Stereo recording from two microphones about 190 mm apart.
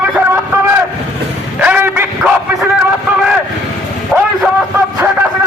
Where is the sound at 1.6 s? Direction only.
10° right (ahead or behind).